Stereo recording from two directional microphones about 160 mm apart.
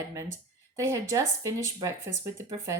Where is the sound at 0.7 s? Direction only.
20° right (ahead or behind).